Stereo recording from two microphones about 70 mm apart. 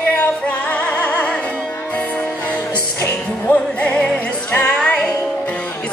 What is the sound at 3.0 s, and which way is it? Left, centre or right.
Music, left.